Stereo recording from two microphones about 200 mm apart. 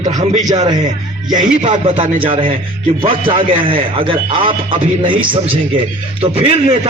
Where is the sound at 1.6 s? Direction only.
30° right (ahead or behind).